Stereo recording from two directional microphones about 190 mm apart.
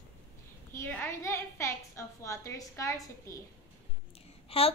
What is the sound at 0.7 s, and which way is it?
A woman's voice, 15° left (ahead or behind).